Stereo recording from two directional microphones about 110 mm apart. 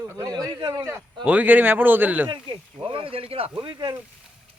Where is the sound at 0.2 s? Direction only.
35° right (ahead or behind).